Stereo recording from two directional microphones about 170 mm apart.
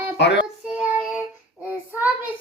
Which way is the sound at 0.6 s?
5° right (ahead or behind).